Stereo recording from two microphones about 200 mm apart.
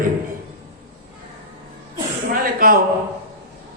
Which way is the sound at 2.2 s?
45° right (ahead or behind).